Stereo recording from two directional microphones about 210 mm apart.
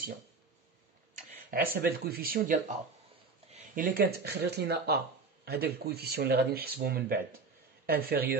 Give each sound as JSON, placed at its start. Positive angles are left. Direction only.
{"t": 1.1, "sound": "a man's voice", "side_deg": -45}